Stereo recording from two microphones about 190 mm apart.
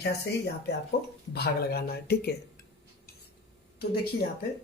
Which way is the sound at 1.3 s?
55° left (ahead or behind).